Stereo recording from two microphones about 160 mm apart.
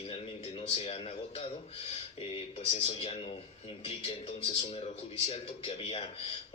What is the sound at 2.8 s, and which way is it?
Speech, 40° left (ahead or behind).